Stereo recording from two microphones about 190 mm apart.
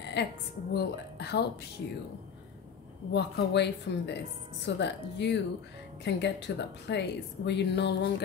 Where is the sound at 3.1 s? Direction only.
65° left (ahead or behind).